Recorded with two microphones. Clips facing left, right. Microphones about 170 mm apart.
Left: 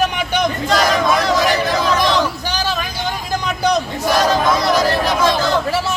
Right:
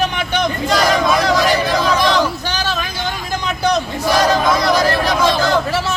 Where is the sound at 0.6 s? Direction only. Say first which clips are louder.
Right 1 dB; centre (ahead or behind).